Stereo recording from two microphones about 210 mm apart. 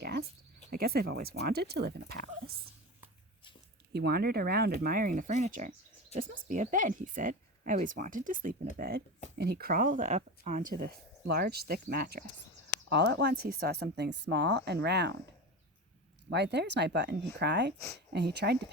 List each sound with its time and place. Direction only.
0.0 s cricket: 50° right (ahead or behind)
0.7 s speech: 45° right (ahead or behind)
3.9 s speech: 50° right (ahead or behind)
16.3 s speech: 55° right (ahead or behind)